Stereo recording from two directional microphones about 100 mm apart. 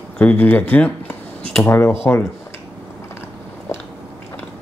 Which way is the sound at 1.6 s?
25° left (ahead or behind).